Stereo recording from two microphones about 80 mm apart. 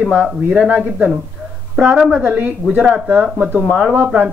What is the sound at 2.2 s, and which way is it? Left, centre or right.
Speech, right.